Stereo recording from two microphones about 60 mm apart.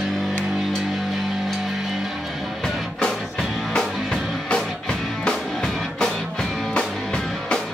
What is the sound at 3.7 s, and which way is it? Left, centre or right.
Music, centre.